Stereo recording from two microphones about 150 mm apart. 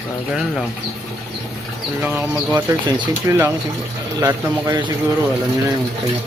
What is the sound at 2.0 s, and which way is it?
A man's voice, 15° right (ahead or behind).